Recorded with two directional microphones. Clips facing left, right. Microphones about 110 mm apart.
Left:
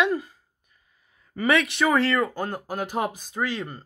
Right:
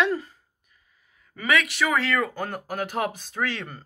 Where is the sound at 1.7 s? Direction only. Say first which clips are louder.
Left 3 dB; 25° left (ahead or behind).